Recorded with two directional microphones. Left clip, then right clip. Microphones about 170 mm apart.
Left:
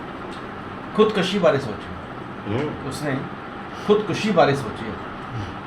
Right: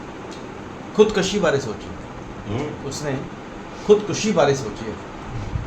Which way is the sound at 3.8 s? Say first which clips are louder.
Right 3 dB; 20° right (ahead or behind).